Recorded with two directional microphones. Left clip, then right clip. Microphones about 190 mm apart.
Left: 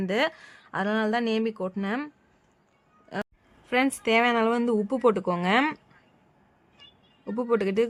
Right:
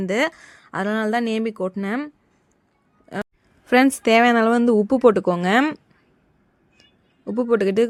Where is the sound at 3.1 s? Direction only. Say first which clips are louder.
Right 4 dB; 20° right (ahead or behind).